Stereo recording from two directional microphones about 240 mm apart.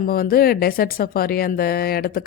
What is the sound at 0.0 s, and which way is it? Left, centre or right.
Speech, left.